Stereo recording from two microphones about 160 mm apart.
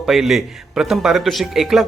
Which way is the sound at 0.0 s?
Centre (ahead or behind).